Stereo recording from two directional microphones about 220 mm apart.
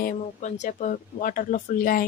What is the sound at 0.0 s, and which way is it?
Speech, 35° left (ahead or behind).